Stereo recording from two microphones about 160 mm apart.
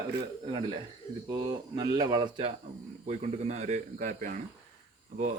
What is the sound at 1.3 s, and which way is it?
A man's voice, 25° right (ahead or behind).